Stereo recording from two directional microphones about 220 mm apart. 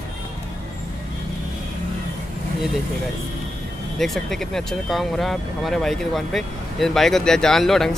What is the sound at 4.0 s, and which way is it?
Speech, centre (ahead or behind).